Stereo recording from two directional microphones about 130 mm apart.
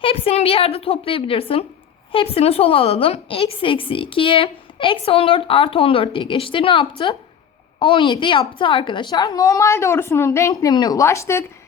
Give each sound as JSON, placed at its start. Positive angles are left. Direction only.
{"t": 0.0, "sound": "a woman's voice", "side_deg": 45}